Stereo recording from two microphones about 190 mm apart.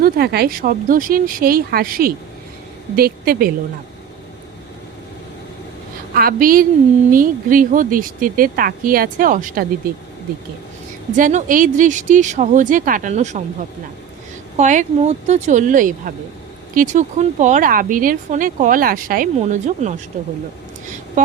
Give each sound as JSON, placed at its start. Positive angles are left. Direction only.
{"t": 0.0, "sound": "speech", "side_deg": -55}
{"t": 6.1, "sound": "speech", "side_deg": -50}
{"t": 11.2, "sound": "speech", "side_deg": -40}
{"t": 14.5, "sound": "speech", "side_deg": -40}